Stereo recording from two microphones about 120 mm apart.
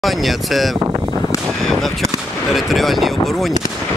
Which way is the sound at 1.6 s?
Centre (ahead or behind).